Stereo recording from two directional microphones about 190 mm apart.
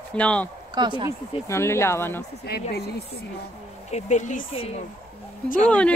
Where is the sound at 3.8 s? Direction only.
35° left (ahead or behind).